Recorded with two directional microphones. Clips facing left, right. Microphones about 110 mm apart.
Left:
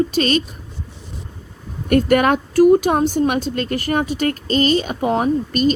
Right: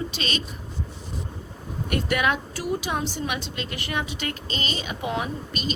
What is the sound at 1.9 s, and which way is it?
A woman's voice, 50° left (ahead or behind).